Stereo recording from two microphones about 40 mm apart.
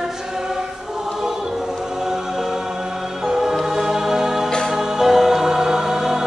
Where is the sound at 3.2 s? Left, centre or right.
Centre.